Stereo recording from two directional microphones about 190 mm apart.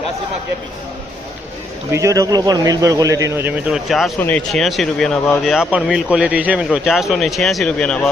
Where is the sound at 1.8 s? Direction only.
15° right (ahead or behind).